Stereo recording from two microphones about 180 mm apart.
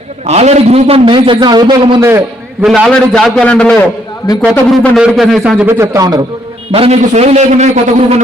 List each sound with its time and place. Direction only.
0.3 s a man's voice: 35° right (ahead or behind)
2.0 s a man's voice: 15° right (ahead or behind)
2.6 s a man's voice: centre (ahead or behind); by 6.2 s 20° right (ahead or behind)
6.7 s a man's voice: 35° right (ahead or behind)